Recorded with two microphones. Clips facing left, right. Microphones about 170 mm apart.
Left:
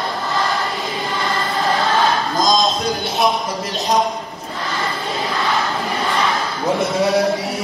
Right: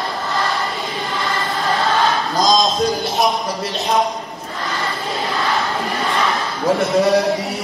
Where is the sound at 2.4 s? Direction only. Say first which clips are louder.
Right 3 dB; centre (ahead or behind).